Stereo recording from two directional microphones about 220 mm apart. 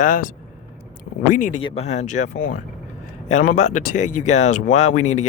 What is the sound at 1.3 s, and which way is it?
Speech, 35° left (ahead or behind).